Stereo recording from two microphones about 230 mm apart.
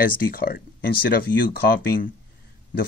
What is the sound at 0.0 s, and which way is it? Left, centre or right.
Speech, left.